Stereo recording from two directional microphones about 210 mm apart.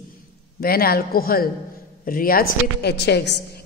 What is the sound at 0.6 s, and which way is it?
A woman's voice, 45° left (ahead or behind).